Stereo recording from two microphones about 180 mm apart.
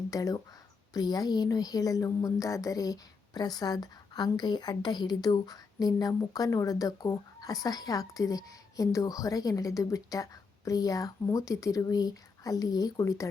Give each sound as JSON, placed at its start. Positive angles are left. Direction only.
{"t": 0.1, "sound": "speech", "side_deg": 20}